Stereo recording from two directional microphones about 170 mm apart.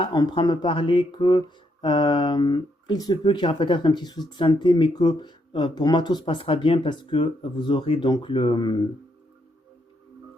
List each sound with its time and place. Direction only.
0.0 s speech: 25° left (ahead or behind)